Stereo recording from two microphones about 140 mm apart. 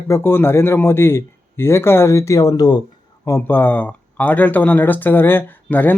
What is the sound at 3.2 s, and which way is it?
Speech, 15° left (ahead or behind).